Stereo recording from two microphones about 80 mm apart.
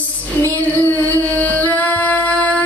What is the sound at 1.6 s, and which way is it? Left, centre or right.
Music, left.